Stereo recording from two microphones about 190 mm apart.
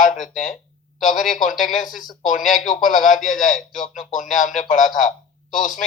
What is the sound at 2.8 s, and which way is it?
Speech, 45° left (ahead or behind).